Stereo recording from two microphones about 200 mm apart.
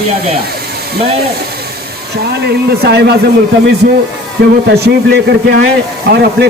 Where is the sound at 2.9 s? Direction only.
55° right (ahead or behind).